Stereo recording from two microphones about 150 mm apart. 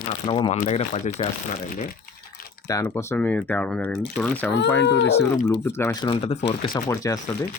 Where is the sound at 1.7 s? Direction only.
65° left (ahead or behind).